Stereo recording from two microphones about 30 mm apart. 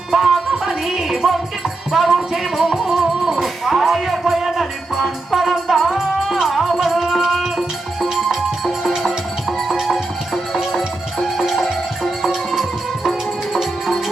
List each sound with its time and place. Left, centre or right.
0.1 s music: centre
8.8 s music: centre
9.8 s music: centre